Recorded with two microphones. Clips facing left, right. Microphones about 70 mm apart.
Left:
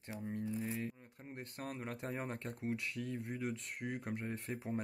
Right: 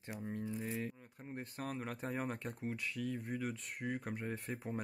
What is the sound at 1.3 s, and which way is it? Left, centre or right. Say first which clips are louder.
Speech: right 2 dB; centre.